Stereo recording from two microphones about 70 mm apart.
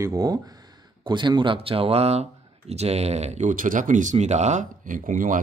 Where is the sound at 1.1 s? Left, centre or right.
Right.